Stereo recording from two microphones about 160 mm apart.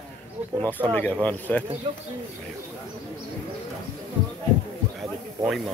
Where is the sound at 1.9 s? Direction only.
30° right (ahead or behind).